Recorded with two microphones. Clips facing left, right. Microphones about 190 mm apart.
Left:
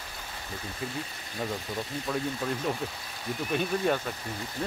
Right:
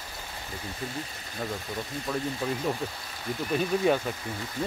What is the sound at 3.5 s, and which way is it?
Speech, 5° right (ahead or behind).